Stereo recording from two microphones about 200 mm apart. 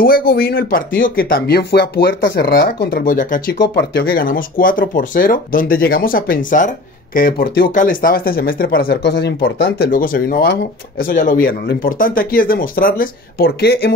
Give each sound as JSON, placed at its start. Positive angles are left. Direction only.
{"t": 0.0, "sound": "speech", "side_deg": 45}
{"t": 3.5, "sound": "speech", "side_deg": 55}